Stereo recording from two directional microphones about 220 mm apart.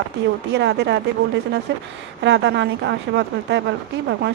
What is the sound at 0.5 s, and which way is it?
Speech, 50° right (ahead or behind).